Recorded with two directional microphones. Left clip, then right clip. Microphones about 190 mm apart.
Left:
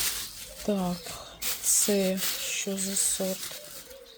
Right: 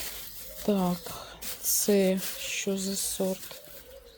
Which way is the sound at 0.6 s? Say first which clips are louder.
Right 2 dB; 15° right (ahead or behind).